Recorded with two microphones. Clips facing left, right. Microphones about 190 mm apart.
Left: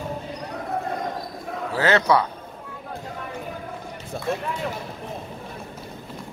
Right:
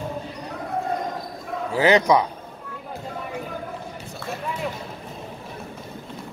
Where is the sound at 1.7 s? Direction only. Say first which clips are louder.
Right 2 dB; 15° right (ahead or behind).